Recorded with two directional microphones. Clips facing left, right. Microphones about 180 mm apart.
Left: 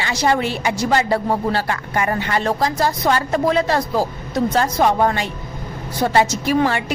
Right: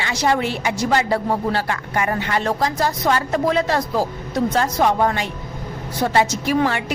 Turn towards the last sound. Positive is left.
turn(degrees=30)  # may be behind; listen again after turning